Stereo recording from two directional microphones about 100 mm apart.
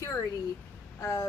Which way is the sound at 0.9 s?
30° left (ahead or behind).